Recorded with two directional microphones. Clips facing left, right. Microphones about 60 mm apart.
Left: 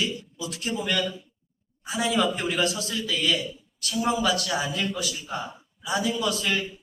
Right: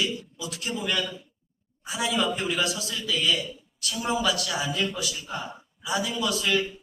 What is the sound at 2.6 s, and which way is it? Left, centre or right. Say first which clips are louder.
A man's voice: left 2 dB; left.